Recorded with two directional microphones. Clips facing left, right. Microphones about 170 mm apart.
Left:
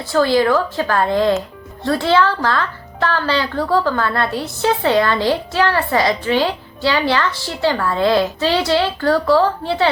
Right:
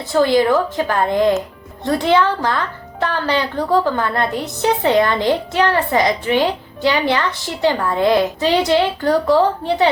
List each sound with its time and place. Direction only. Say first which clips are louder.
0.1 s a woman's voice: right 1 dB; 20° right (ahead or behind)